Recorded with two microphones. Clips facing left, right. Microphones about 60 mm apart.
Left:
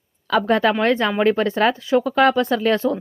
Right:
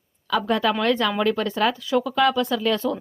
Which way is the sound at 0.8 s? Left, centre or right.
Left.